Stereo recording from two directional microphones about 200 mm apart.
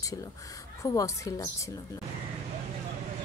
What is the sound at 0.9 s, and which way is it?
Speech, 15° left (ahead or behind).